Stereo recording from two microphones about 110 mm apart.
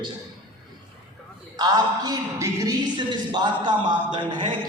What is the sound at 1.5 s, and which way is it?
Speech, 40° right (ahead or behind).